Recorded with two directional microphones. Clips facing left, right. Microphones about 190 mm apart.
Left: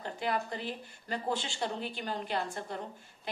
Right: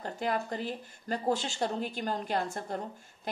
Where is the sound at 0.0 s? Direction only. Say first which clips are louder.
Right 2 dB; 45° right (ahead or behind).